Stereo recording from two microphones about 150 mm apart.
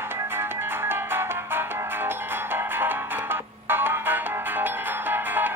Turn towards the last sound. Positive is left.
turn(degrees=-15)  # may be behind; listen again after turning